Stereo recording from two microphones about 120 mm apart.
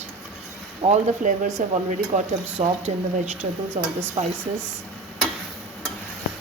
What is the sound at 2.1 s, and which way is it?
Speech, 75° right (ahead or behind).